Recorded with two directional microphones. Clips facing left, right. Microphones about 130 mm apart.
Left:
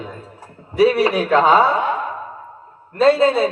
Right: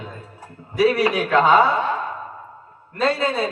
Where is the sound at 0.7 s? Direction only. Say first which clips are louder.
Left 3 dB; 30° left (ahead or behind).